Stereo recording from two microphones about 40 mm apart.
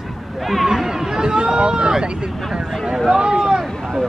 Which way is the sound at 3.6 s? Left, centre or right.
Centre.